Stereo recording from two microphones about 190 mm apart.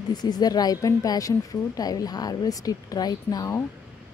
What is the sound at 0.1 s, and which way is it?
A woman's voice, 20° left (ahead or behind).